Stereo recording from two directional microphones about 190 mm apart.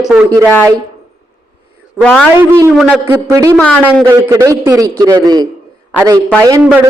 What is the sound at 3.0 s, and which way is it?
Speech, 20° right (ahead or behind).